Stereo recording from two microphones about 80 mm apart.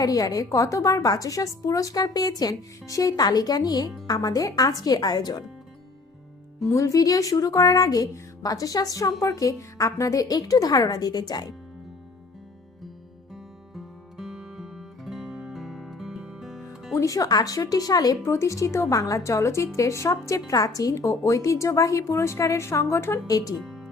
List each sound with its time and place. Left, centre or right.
0.0 s speech: left
6.7 s speech: left
13.3 s music: centre
16.9 s speech: left
18.3 s a woman's voice: left
18.9 s a woman's voice: left
23.2 s speech: left
23.6 s music: centre